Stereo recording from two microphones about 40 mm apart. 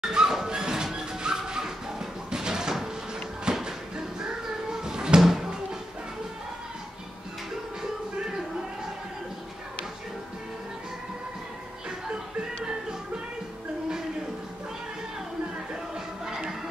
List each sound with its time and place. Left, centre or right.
0.1 s music: centre
3.4 s a sound: centre
16.3 s music: centre